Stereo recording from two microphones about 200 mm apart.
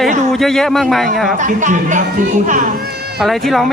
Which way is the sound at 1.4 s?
40° right (ahead or behind).